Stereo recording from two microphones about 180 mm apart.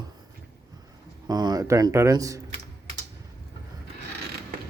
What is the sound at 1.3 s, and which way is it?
Speech, 20° right (ahead or behind).